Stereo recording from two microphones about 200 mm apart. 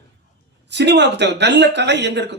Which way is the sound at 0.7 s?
60° right (ahead or behind).